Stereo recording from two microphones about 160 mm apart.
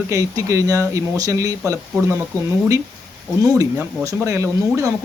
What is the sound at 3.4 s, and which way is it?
Speech, 20° right (ahead or behind).